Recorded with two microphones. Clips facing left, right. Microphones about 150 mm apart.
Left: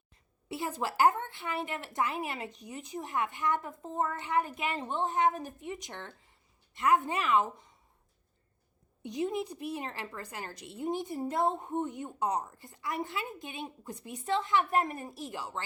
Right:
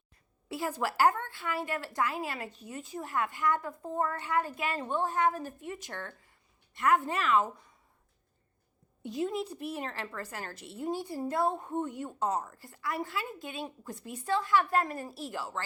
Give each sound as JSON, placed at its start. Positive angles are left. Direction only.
{"t": 0.4, "sound": "a woman's voice", "side_deg": 20}
{"t": 9.0, "sound": "a woman's voice", "side_deg": 20}